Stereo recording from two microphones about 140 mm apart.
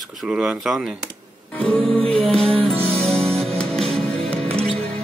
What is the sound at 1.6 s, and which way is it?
Music, 40° right (ahead or behind).